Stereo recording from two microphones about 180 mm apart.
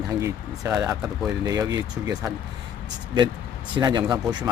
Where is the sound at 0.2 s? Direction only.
15° right (ahead or behind).